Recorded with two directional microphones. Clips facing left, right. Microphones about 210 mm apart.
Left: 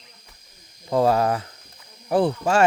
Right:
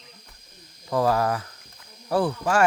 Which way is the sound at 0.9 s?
25° left (ahead or behind).